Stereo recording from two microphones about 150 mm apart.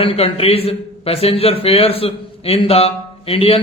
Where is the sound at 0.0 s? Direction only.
40° left (ahead or behind).